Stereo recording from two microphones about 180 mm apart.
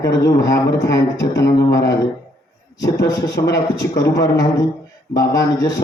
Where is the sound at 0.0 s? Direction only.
20° left (ahead or behind).